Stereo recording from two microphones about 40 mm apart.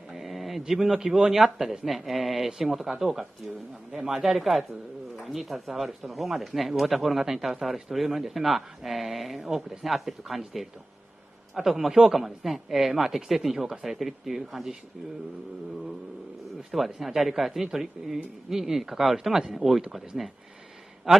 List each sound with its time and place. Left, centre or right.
0.1 s a sound: centre
0.7 s speech: centre
16.7 s speech: centre
21.1 s a man's voice: right